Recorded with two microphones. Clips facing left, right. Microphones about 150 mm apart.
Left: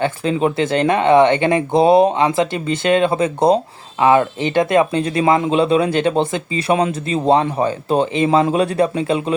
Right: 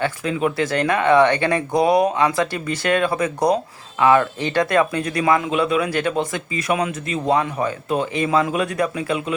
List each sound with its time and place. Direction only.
0.0 s speech: 30° left (ahead or behind)